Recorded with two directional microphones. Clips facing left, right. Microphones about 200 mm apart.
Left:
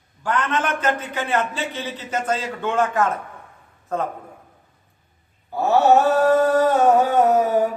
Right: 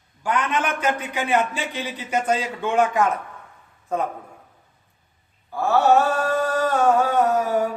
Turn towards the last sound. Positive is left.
turn(degrees=20)  # may be behind; listen again after turning